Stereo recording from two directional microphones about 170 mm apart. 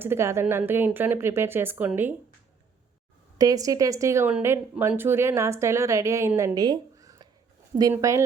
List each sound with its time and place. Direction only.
0.0 s a woman's voice: 15° right (ahead or behind)
3.3 s a woman's voice: 20° right (ahead or behind)